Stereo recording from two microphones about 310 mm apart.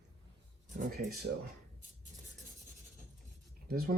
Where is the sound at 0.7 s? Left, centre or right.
Right.